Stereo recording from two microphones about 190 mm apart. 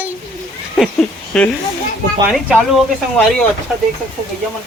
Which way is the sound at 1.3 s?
5° left (ahead or behind).